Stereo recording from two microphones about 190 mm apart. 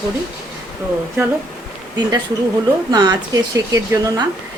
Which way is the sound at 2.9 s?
20° right (ahead or behind).